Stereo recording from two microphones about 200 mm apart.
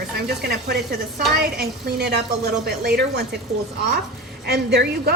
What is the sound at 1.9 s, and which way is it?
Speech, 55° right (ahead or behind).